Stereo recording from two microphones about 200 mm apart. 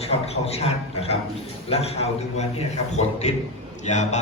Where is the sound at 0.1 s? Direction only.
30° left (ahead or behind).